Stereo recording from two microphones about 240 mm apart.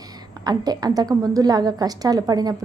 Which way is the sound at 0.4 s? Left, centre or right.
Centre.